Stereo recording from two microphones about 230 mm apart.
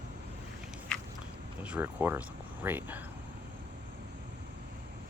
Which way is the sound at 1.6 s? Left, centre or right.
Centre.